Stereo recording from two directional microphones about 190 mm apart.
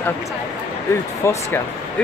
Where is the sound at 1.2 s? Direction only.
15° left (ahead or behind).